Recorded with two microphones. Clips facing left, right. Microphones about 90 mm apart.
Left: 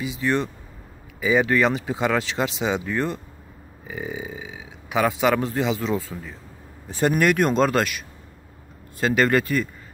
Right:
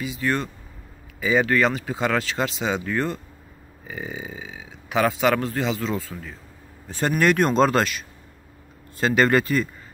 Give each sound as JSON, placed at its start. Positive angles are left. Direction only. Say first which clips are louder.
{"t": 0.0, "sound": "speech", "louder": "left 2 dB", "side_deg": 15}
{"t": 9.0, "sound": "speech", "louder": "right 1 dB", "side_deg": 0}